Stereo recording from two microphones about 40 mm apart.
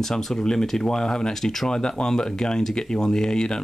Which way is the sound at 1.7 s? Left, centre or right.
Centre.